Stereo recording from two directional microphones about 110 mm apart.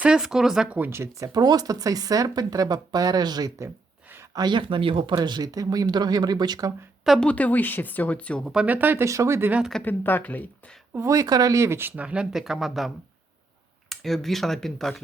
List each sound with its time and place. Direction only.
0.0 s speech: 5° right (ahead or behind)
0.8 s speech: 25° right (ahead or behind)
1.3 s speech: 35° right (ahead or behind); by 5.1 s 55° right (ahead or behind)
5.1 s speech: 40° right (ahead or behind)
7.0 s speech: centre (ahead or behind)
7.3 s speech: 15° left (ahead or behind)
8.6 s speech: 15° right (ahead or behind)
9.8 s speech: 15° left (ahead or behind)
10.9 s speech: 30° right (ahead or behind); by 12.9 s centre (ahead or behind)
13.9 s speech: centre (ahead or behind)